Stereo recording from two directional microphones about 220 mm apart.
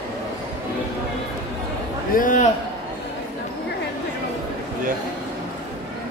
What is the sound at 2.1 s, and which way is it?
Speech, 35° left (ahead or behind).